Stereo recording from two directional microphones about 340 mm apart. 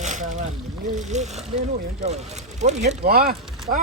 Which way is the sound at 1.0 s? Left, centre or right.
Right.